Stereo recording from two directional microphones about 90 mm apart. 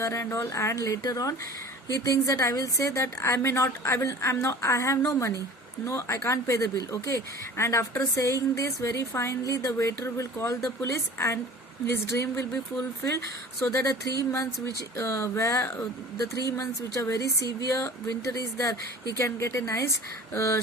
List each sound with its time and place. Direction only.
0.0 s speech: 35° left (ahead or behind)
17.1 s speech: 40° left (ahead or behind)